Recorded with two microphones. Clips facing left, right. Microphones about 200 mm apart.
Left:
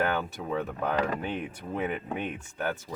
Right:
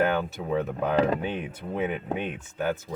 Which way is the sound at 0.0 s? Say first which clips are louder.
Right 4 dB; 15° right (ahead or behind).